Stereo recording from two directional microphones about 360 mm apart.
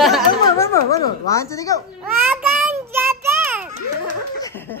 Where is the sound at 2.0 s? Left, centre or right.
Centre.